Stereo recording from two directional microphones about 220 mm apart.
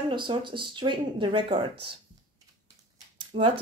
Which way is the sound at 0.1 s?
20° right (ahead or behind).